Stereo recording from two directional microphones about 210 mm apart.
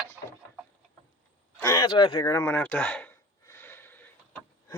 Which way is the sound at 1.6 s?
15° left (ahead or behind).